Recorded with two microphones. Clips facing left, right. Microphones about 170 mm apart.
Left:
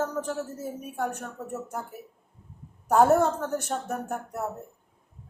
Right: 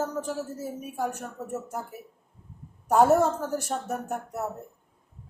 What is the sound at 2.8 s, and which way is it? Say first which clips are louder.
Speech: even; 5° right (ahead or behind).